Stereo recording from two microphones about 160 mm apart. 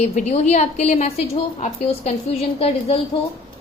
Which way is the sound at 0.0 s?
45° left (ahead or behind).